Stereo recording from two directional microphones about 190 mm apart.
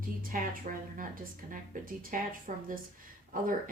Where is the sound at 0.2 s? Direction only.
45° right (ahead or behind).